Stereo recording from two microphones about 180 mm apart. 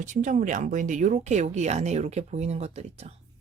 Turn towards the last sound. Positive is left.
turn(degrees=-35)  # may be behind; listen again after turning